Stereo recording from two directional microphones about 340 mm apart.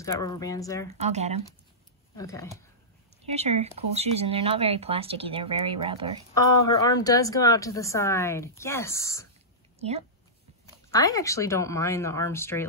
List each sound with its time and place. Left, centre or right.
0.0 s speech: centre
0.9 s speech: centre
2.1 s speech: centre
3.3 s speech: centre
6.3 s speech: centre
9.8 s speech: centre
10.9 s speech: centre